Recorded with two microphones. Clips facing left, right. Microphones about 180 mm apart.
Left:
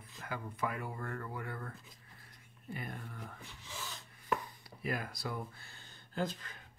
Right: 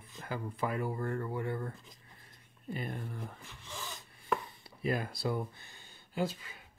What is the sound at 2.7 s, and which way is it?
Speech, 30° right (ahead or behind).